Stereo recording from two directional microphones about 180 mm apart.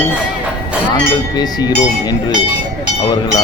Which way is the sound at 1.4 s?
20° left (ahead or behind).